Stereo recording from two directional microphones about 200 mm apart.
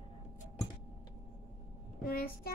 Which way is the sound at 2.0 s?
50° left (ahead or behind).